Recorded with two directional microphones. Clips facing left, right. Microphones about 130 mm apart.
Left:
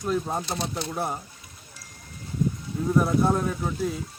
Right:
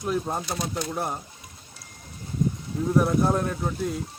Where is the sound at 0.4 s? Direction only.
30° left (ahead or behind).